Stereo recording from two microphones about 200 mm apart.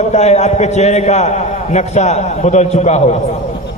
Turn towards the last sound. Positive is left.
turn(degrees=35)  # may be behind; listen again after turning